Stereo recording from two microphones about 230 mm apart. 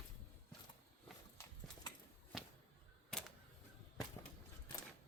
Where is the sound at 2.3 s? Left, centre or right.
Centre.